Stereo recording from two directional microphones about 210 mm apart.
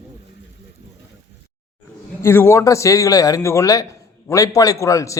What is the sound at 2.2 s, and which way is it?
A man's voice, 10° left (ahead or behind).